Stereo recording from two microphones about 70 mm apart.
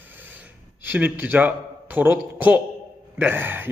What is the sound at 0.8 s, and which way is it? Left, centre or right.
A man's voice, right.